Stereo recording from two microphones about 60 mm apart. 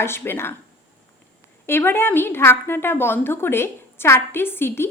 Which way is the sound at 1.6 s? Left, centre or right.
Left.